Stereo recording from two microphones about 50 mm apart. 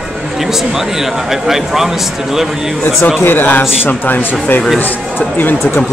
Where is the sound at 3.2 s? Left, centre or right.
Left.